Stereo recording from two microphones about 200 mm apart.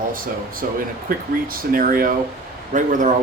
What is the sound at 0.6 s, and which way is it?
Speech, 45° right (ahead or behind).